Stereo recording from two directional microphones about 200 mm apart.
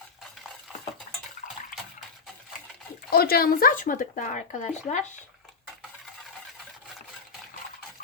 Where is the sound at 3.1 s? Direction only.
50° left (ahead or behind).